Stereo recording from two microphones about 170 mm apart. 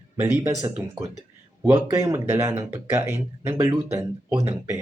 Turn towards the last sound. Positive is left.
turn(degrees=-20)  # may be behind; listen again after turning